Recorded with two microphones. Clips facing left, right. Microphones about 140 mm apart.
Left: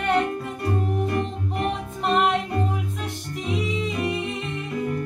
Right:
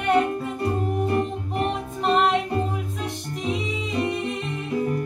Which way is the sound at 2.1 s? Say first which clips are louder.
Even; centre (ahead or behind).